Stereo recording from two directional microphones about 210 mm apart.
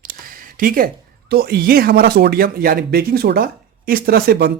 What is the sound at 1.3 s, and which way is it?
Speech, 45° right (ahead or behind).